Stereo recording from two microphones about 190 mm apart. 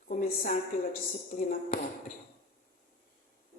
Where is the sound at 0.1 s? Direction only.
45° left (ahead or behind).